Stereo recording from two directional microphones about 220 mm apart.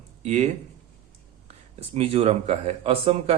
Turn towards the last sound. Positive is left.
turn(degrees=-25)  # may be behind; listen again after turning